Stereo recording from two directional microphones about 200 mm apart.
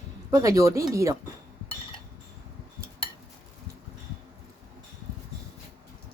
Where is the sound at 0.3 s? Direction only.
15° right (ahead or behind).